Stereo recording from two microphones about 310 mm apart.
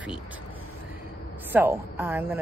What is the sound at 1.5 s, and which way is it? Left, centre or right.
Speech, centre.